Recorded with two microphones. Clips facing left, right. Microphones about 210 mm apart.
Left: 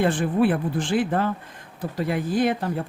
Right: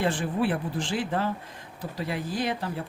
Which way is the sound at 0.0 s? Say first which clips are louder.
Left 6 dB; 55° left (ahead or behind).